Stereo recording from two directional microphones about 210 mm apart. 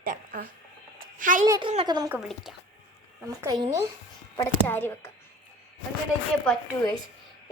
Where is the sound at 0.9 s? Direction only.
40° right (ahead or behind).